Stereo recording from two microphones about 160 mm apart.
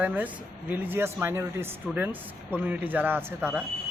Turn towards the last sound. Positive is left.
turn(degrees=-15)  # may be behind; listen again after turning